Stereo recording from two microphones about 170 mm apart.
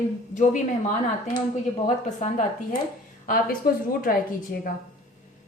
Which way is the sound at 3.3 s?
55° left (ahead or behind).